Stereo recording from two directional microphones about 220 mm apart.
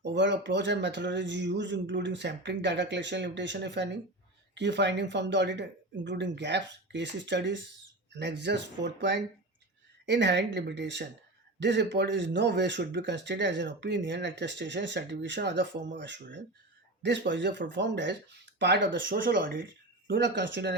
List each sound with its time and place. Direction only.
0.0 s speech: 55° right (ahead or behind)